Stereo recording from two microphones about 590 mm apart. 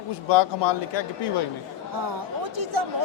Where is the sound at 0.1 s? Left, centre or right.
Left.